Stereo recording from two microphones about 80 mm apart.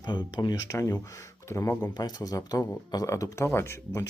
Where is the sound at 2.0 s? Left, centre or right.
Left.